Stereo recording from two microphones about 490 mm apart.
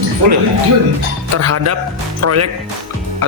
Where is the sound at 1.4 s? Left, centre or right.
Right.